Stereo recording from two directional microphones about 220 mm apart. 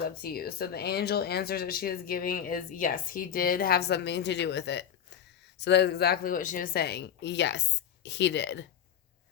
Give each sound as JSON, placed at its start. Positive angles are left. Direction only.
{"t": 0.0, "sound": "speech", "side_deg": 45}